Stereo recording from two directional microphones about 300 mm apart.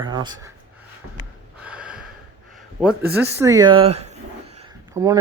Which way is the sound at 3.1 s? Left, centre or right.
Centre.